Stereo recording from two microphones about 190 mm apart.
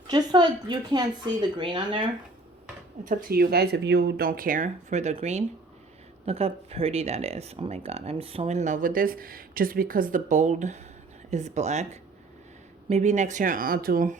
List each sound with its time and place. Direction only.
0.1 s a woman's voice: 20° right (ahead or behind)
3.0 s speech: 45° right (ahead or behind)